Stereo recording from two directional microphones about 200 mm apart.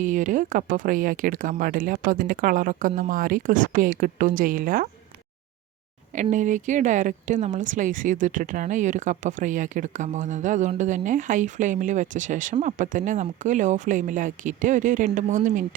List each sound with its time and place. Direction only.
0.0 s speech: 40° right (ahead or behind)
6.3 s speech: 40° right (ahead or behind)